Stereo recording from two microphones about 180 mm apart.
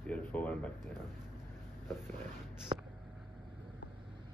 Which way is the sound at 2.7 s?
35° right (ahead or behind).